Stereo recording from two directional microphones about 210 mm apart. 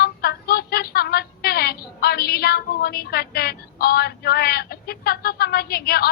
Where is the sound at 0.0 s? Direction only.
45° left (ahead or behind).